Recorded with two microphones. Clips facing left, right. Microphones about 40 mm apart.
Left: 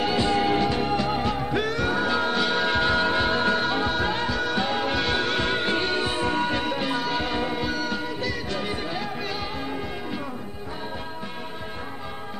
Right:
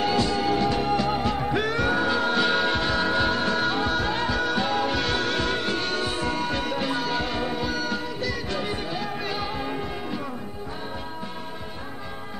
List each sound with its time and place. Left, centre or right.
0.2 s music: left
0.6 s music: centre
1.4 s music: centre
2.0 s music: centre
2.4 s music: centre
2.9 s music: left
3.6 s music: centre; by 6.5 s left
6.5 s music: centre